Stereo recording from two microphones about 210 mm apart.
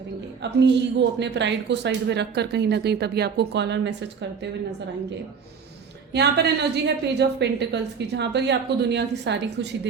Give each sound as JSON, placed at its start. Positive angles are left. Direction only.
{"t": 0.6, "sound": "speech", "side_deg": -55}
{"t": 6.1, "sound": "speech", "side_deg": -55}